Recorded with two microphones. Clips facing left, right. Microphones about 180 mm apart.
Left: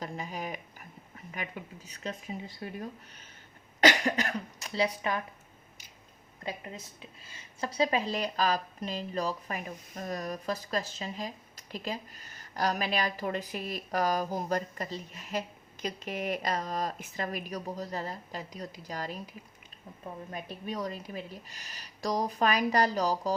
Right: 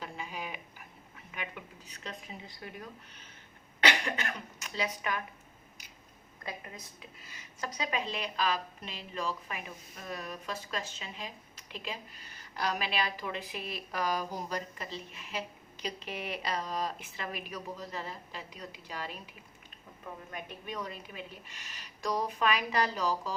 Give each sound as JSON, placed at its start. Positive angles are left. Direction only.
{"t": 0.0, "sound": "a sound", "side_deg": 40}
{"t": 1.3, "sound": "speech", "side_deg": 40}
{"t": 3.8, "sound": "speech", "side_deg": 40}
{"t": 7.2, "sound": "a woman's voice", "side_deg": 30}
{"t": 20.3, "sound": "a woman's voice", "side_deg": 35}